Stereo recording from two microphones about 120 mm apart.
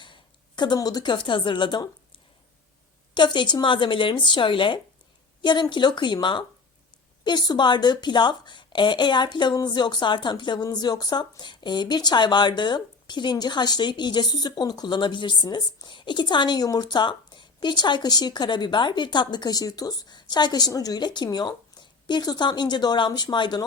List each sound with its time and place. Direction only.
0.0 s a woman's voice: 40° left (ahead or behind)